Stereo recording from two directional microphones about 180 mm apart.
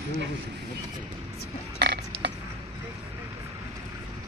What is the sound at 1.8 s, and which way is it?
Burping, 65° right (ahead or behind).